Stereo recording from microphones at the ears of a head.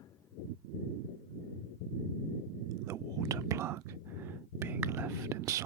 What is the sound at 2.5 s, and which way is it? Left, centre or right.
Whispering, right.